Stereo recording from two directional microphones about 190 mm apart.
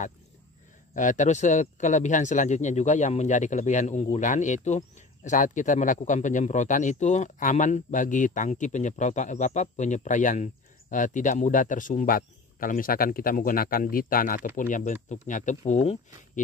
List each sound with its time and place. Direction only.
0.9 s speech: 40° left (ahead or behind)